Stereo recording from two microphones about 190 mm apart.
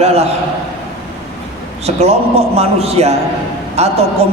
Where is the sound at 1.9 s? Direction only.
35° right (ahead or behind).